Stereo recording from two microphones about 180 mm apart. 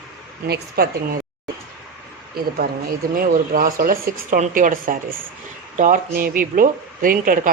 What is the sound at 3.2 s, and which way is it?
Speech, 50° right (ahead or behind).